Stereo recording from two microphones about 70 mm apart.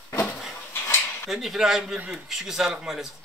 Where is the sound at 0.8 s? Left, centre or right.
Left.